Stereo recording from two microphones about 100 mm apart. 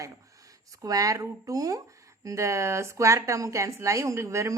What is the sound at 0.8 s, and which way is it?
A woman's voice, 35° right (ahead or behind).